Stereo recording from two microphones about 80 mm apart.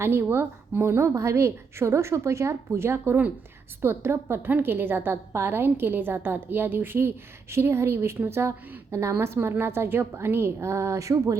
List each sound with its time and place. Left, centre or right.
0.0 s a woman's voice: right